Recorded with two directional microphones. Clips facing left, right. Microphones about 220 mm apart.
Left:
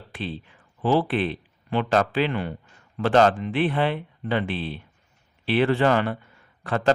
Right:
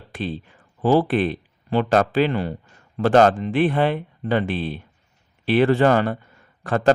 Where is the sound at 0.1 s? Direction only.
45° right (ahead or behind).